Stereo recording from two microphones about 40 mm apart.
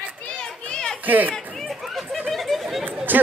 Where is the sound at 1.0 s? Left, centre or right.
Right.